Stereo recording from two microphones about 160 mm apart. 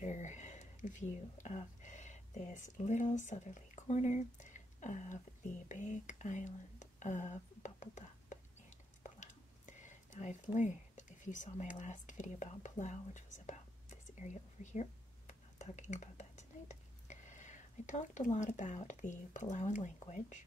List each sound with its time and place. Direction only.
0.0 s speech: 50° left (ahead or behind)